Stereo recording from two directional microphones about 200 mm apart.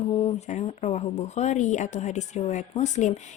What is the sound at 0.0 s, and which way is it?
Speech, 30° left (ahead or behind).